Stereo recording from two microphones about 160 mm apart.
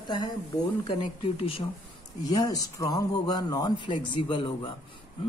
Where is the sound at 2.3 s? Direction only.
20° left (ahead or behind).